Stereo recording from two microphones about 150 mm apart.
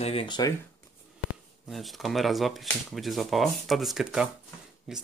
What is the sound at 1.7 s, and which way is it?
Speech, centre (ahead or behind).